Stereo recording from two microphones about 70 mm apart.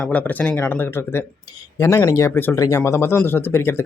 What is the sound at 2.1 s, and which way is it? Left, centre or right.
Speech, left.